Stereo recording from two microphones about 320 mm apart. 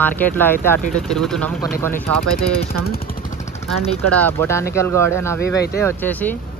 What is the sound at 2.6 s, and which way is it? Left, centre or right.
Speech, left.